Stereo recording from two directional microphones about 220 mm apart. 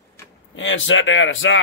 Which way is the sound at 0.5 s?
60° left (ahead or behind).